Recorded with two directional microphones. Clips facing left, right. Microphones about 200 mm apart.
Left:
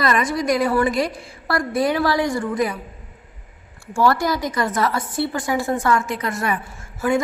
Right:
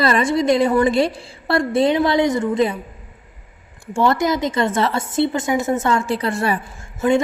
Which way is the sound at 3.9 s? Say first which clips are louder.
Right 1 dB; 20° right (ahead or behind).